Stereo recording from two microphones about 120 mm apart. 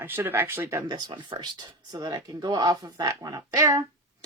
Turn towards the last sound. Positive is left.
turn(degrees=-30)  # may be behind; listen again after turning